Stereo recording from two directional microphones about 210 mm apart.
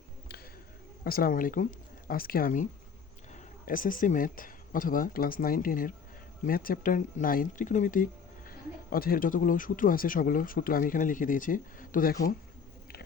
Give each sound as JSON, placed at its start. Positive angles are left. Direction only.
{"t": 1.0, "sound": "speech", "side_deg": 45}
{"t": 3.7, "sound": "speech", "side_deg": 40}